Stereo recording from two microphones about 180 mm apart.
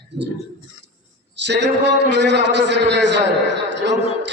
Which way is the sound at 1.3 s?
75° right (ahead or behind).